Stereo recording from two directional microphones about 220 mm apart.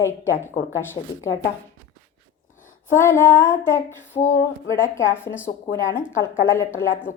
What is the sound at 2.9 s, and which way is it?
Female singing, 10° left (ahead or behind).